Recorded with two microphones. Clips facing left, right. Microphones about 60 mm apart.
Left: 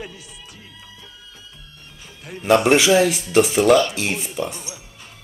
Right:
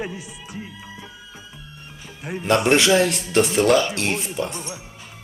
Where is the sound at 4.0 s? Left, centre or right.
Centre.